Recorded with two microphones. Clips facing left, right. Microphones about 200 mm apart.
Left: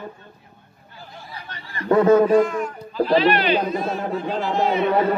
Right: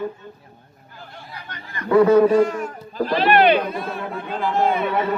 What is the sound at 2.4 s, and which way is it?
Speech, 40° right (ahead or behind).